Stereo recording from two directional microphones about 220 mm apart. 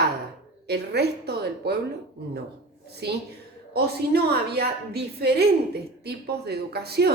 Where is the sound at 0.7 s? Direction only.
50° right (ahead or behind).